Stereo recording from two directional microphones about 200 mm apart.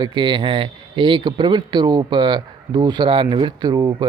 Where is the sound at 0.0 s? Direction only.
25° right (ahead or behind).